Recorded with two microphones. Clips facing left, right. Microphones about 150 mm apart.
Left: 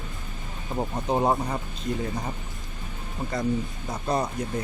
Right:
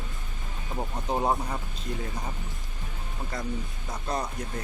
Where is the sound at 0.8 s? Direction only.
15° left (ahead or behind).